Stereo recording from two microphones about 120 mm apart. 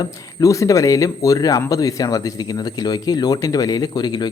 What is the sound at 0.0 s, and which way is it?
Speech, 30° left (ahead or behind).